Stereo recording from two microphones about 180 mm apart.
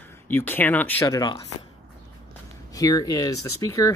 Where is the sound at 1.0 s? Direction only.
20° left (ahead or behind).